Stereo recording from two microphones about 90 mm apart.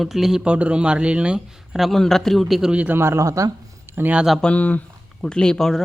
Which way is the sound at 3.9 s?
20° right (ahead or behind).